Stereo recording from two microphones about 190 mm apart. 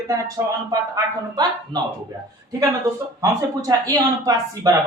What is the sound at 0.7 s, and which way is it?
A man's voice, 20° right (ahead or behind).